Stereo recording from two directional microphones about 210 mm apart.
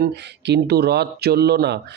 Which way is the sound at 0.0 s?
55° right (ahead or behind).